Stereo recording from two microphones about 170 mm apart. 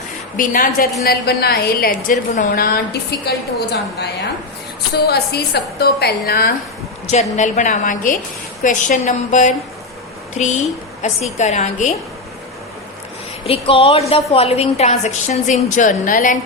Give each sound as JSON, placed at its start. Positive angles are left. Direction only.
{"t": 0.3, "sound": "a woman's voice", "side_deg": 55}
{"t": 1.0, "sound": "a woman's voice", "side_deg": 65}
{"t": 2.5, "sound": "a woman's voice", "side_deg": 65}
{"t": 7.3, "sound": "a woman's voice", "side_deg": 45}
{"t": 13.4, "sound": "a woman's voice", "side_deg": 35}